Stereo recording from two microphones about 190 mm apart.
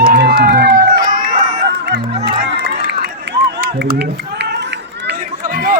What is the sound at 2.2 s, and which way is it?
Run, 60° right (ahead or behind).